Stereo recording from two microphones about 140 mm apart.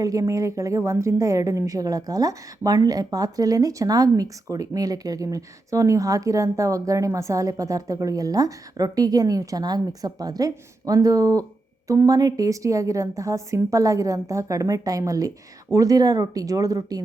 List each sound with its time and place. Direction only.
0.0 s a woman's voice: 25° right (ahead or behind)